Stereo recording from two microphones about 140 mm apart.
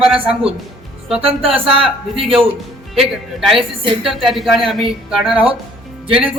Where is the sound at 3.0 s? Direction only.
5° right (ahead or behind).